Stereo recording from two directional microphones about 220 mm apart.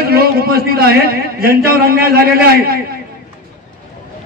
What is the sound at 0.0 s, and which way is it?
A man's voice, 45° right (ahead or behind).